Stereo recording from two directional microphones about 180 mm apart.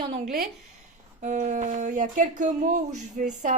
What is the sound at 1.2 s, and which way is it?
Speech, 45° right (ahead or behind).